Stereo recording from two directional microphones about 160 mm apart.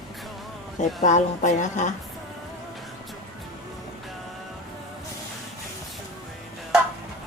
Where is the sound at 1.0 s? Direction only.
50° left (ahead or behind).